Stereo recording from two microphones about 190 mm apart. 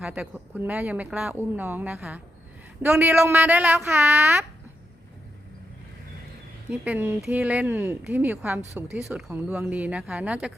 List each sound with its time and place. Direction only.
0.0 s speech: 5° right (ahead or behind)
6.7 s speech: 10° right (ahead or behind)